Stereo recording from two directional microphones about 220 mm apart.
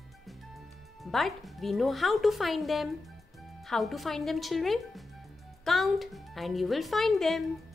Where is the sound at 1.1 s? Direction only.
Centre (ahead or behind).